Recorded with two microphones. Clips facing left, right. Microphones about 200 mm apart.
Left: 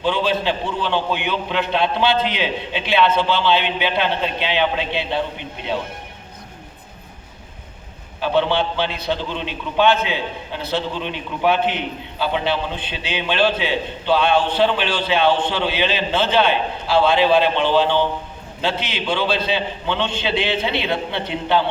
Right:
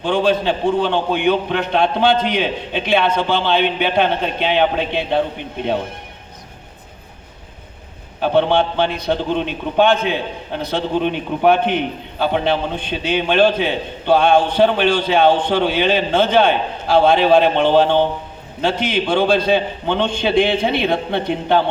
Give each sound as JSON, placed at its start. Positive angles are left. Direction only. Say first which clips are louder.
{"t": 0.0, "sound": "a man's voice", "louder": "right 3 dB", "side_deg": -50}
{"t": 8.2, "sound": "a man's voice", "louder": "right 4 dB", "side_deg": -50}